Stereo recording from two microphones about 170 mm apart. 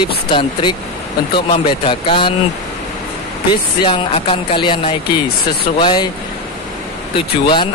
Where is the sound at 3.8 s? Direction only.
30° left (ahead or behind).